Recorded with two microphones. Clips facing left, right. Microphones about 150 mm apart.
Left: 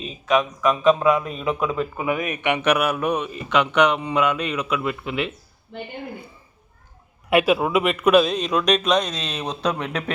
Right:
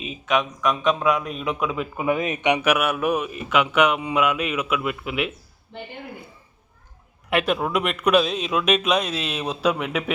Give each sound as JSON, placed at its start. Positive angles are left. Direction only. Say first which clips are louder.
{"t": 0.0, "sound": "a man's voice", "louder": "left 2 dB", "side_deg": 0}
{"t": 2.0, "sound": "speech", "louder": "right 1 dB", "side_deg": -25}
{"t": 2.6, "sound": "a man's voice", "louder": "left 1 dB", "side_deg": -5}
{"t": 7.3, "sound": "a man's voice", "louder": "left 4 dB", "side_deg": 5}